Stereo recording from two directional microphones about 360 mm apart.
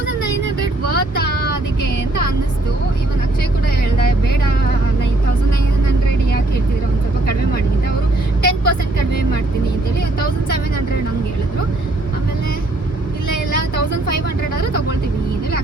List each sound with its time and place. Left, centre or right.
0.9 s vehicle: left
3.9 s speech: left
8.4 s vehicle: left